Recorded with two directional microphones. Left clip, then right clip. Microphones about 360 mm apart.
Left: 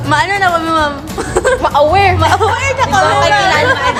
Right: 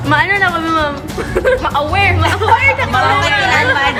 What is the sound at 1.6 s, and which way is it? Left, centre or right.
Speech, left.